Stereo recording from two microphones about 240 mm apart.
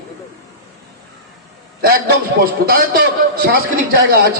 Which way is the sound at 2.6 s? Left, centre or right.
Right.